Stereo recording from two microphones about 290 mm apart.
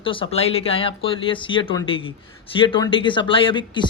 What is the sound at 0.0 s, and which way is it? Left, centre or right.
Speech, centre.